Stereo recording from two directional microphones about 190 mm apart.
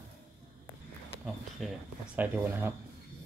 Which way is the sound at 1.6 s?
Centre (ahead or behind).